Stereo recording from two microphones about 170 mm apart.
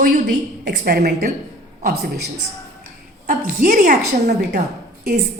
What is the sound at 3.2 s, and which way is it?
A woman's voice, 50° right (ahead or behind).